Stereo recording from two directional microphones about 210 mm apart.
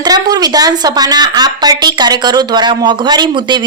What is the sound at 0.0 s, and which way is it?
A woman's voice, 20° right (ahead or behind).